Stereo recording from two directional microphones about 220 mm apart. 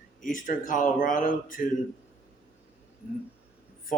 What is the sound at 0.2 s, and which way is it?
Speech, 35° left (ahead or behind).